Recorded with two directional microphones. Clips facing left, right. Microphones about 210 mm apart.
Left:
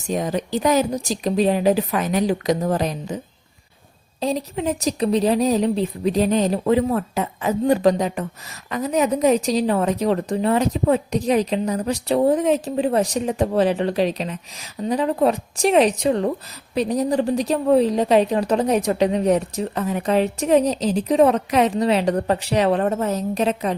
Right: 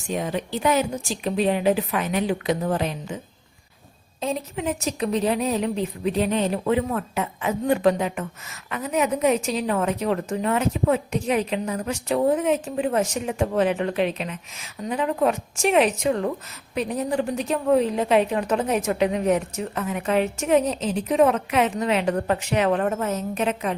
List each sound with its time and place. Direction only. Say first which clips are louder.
0.1 s a woman's voice: left 4 dB; 40° left (ahead or behind)
4.2 s a woman's voice: left 4 dB; 35° left (ahead or behind)